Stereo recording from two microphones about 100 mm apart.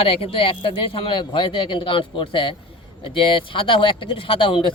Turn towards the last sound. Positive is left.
turn(degrees=60)  # may be behind; listen again after turning